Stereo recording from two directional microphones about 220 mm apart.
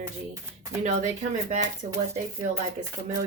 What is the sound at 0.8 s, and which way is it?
Speech, 35° right (ahead or behind).